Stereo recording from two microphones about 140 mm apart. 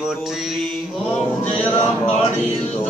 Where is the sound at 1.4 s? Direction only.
50° left (ahead or behind).